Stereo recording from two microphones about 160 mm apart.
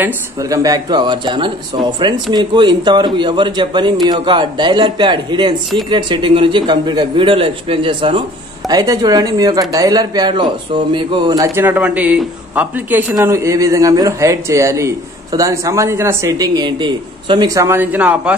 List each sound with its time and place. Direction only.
0.0 s a man's voice: 20° right (ahead or behind)